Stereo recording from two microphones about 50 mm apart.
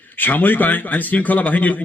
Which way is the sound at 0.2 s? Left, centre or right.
Left.